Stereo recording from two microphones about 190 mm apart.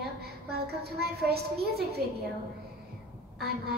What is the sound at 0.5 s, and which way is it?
A woman's voice, 55° right (ahead or behind).